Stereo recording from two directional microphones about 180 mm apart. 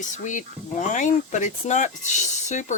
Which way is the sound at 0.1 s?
45° left (ahead or behind).